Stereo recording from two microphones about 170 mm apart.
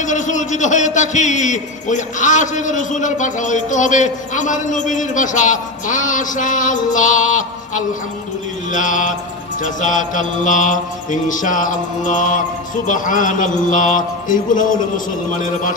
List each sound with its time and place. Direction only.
0.0 s a man's voice: 45° left (ahead or behind)